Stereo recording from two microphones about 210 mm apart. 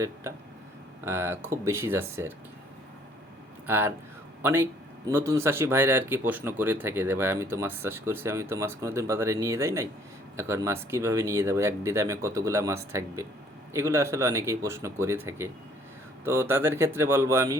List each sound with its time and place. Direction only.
1.0 s speech: 10° right (ahead or behind)
3.7 s speech: 10° right (ahead or behind)